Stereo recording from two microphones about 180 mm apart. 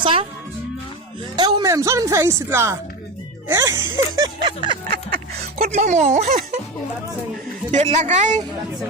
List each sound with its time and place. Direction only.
0.0 s speech: 30° right (ahead or behind)
1.4 s speech: 25° right (ahead or behind)
5.6 s speech: 40° right (ahead or behind)
7.7 s speech: 40° right (ahead or behind)